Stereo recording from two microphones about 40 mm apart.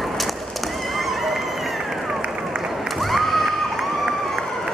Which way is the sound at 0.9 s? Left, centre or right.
Centre.